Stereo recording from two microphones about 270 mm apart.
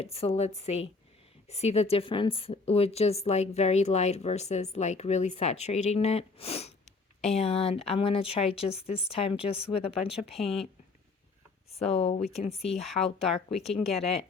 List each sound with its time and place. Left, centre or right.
0.0 s a woman's voice: left
11.9 s a woman's voice: left
12.8 s speech: centre
13.6 s a woman's voice: left
13.8 s speech: centre